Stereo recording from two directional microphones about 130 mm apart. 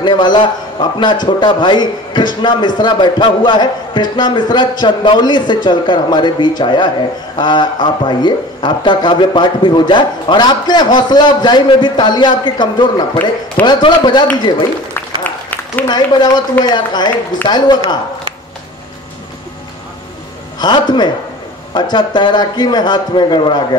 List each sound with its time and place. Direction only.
0.0 s a man's voice: 35° left (ahead or behind)
15.2 s applause: 15° left (ahead or behind)
15.9 s speech: 35° left (ahead or behind)
20.5 s a man's voice: 35° left (ahead or behind)
21.9 s speech: 35° left (ahead or behind)